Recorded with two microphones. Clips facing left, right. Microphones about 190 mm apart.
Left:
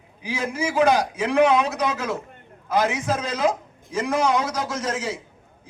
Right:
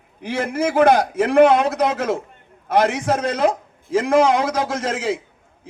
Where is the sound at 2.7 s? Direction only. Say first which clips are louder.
Right 4 dB; 65° right (ahead or behind).